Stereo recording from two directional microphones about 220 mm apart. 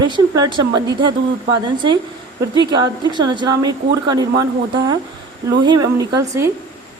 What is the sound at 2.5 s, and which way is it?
A woman's voice, 20° right (ahead or behind).